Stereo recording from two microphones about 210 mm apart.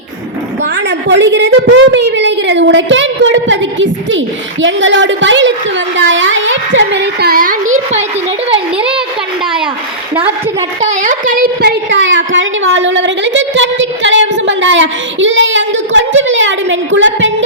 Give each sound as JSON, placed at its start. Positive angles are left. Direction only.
{"t": 0.9, "sound": "a woman's voice", "side_deg": -60}
{"t": 10.8, "sound": "a woman's voice", "side_deg": -35}